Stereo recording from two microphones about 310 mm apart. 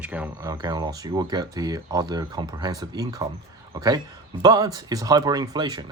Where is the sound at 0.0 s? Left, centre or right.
Centre.